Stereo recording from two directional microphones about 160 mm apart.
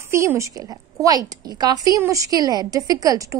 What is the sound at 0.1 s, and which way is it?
A woman's voice, 15° right (ahead or behind).